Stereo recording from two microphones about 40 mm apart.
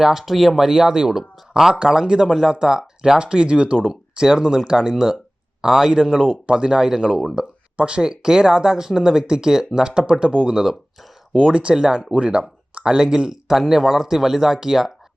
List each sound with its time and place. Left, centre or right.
0.0 s speech: centre; by 3.8 s right
3.8 s speech: centre
10.5 s speech: centre
11.3 s speech: right
11.7 s speech: centre
12.1 s speech: right; by 14.9 s centre